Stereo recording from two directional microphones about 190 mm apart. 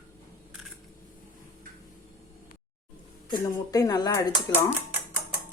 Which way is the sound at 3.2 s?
20° left (ahead or behind).